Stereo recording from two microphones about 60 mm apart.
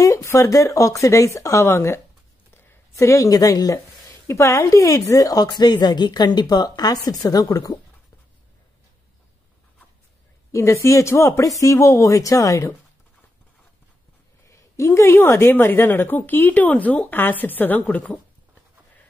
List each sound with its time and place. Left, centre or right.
0.0 s speech: left
3.0 s speech: left
3.3 s speech: left
4.3 s speech: left
10.5 s speech: left
14.5 s a sound: left
15.2 s speech: left